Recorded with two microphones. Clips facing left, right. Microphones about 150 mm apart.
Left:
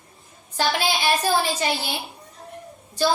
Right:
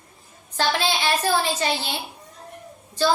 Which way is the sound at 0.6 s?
15° left (ahead or behind).